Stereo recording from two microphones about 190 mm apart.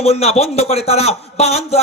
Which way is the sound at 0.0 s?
35° left (ahead or behind).